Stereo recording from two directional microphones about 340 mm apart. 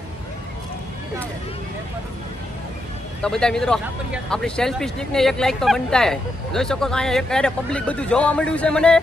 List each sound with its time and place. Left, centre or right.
3.2 s speech: centre